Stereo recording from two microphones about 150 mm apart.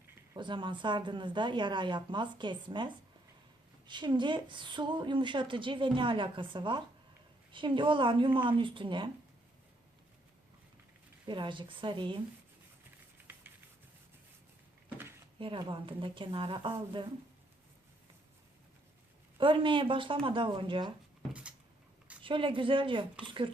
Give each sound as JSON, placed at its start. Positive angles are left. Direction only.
{"t": 0.3, "sound": "a woman's voice", "side_deg": -30}
{"t": 11.3, "sound": "a woman's voice", "side_deg": -30}
{"t": 15.4, "sound": "a woman's voice", "side_deg": -30}
{"t": 19.4, "sound": "a woman's voice", "side_deg": -35}
{"t": 22.2, "sound": "a woman's voice", "side_deg": -35}